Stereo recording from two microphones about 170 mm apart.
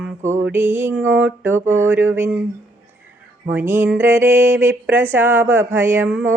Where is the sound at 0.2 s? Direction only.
45° right (ahead or behind).